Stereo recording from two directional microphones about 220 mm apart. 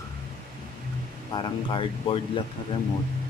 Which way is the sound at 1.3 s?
20° left (ahead or behind).